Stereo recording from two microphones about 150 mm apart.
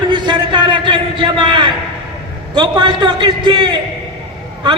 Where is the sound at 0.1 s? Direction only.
30° right (ahead or behind).